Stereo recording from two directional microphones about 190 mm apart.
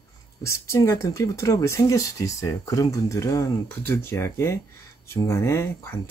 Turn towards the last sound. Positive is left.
turn(degrees=15)  # may be behind; listen again after turning